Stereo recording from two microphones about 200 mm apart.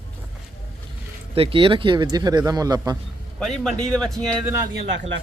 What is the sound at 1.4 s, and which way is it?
Speech, 25° right (ahead or behind).